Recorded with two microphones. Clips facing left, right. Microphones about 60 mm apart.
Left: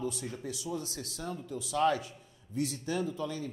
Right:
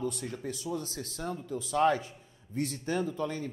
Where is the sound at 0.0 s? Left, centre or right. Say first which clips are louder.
Right 2 dB; right.